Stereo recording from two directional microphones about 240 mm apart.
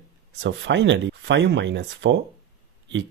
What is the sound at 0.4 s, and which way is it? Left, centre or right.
Speech, right.